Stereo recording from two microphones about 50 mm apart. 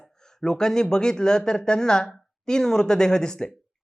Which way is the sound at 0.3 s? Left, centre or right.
Centre.